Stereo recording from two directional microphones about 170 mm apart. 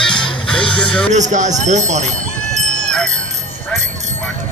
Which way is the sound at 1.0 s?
45° right (ahead or behind).